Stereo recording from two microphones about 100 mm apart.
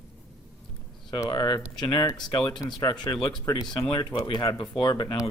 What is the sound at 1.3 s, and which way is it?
Speech, 50° left (ahead or behind).